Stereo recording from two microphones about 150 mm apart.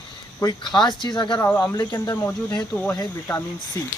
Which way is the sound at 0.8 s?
30° left (ahead or behind).